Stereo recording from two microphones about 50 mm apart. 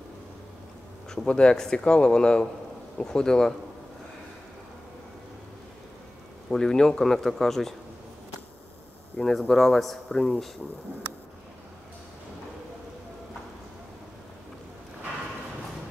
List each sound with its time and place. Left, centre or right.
1.1 s speech: centre
6.5 s speech: centre
9.2 s speech: centre